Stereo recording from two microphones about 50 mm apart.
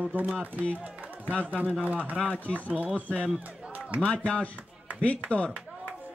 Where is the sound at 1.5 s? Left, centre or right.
Right.